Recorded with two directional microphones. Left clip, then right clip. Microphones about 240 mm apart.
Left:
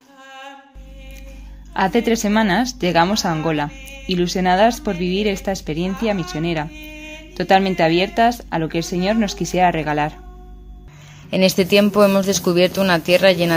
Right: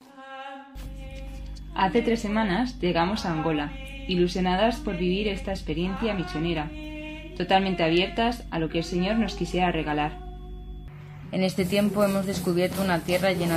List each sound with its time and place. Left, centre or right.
1.7 s speech: left
11.2 s speech: left